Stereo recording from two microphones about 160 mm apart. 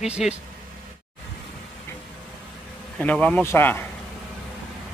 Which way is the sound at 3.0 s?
10° left (ahead or behind).